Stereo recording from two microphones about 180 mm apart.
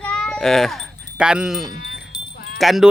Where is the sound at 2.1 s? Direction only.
25° left (ahead or behind).